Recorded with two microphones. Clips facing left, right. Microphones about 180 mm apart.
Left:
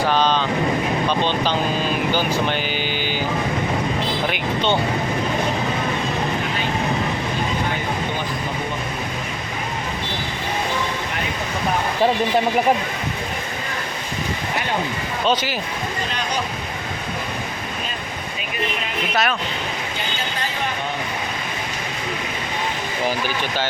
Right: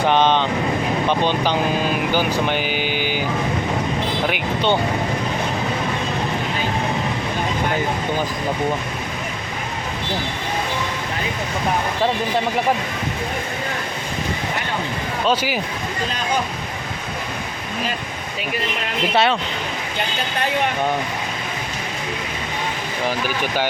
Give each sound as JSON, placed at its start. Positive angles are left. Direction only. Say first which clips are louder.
{"t": 0.0, "sound": "vehicle", "louder": "right 2 dB", "side_deg": -20}
{"t": 1.0, "sound": "speech", "louder": "right 1 dB", "side_deg": -15}
{"t": 2.1, "sound": "vehicle", "louder": "right 1 dB", "side_deg": -15}
{"t": 4.3, "sound": "vehicle", "louder": "right 2 dB", "side_deg": -10}
{"t": 15.3, "sound": "speech", "louder": "right 1 dB", "side_deg": -10}
{"t": 19.1, "sound": "speech", "louder": "right 4 dB", "side_deg": -30}